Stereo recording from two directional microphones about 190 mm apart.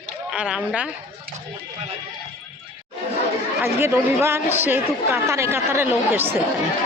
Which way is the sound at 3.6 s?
15° right (ahead or behind).